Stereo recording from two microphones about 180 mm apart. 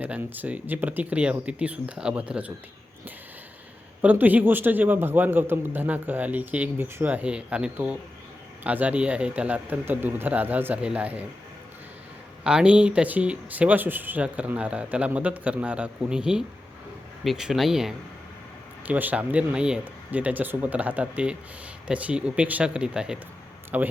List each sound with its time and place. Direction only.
0.0 s speech: 10° right (ahead or behind)
4.0 s speech: 10° right (ahead or behind)
12.5 s speech: 5° right (ahead or behind)